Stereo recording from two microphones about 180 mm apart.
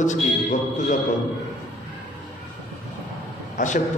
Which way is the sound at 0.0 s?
45° left (ahead or behind).